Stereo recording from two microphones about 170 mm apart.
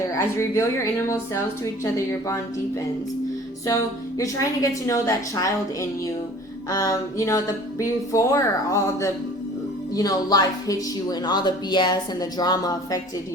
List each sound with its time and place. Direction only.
0.3 s a woman's voice: 15° left (ahead or behind)
4.2 s speech: 20° left (ahead or behind)